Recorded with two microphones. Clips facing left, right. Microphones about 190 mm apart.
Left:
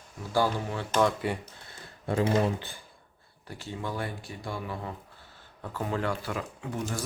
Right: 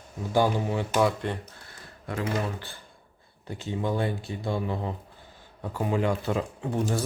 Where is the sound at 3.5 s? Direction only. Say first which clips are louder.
Right 6 dB; 20° right (ahead or behind).